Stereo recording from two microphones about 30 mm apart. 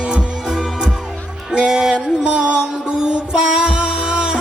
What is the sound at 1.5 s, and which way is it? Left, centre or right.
Music, right.